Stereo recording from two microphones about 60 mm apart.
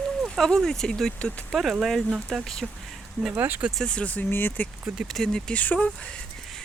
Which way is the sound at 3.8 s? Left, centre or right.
Centre.